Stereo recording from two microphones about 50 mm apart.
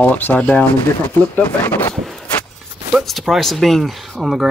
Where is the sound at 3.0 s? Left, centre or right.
Centre.